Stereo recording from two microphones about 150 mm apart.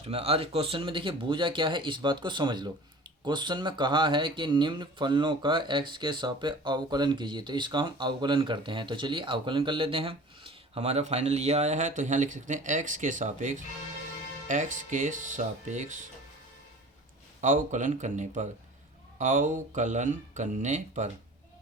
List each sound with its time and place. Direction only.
0.0 s speech: 40° right (ahead or behind)
17.4 s speech: 60° right (ahead or behind)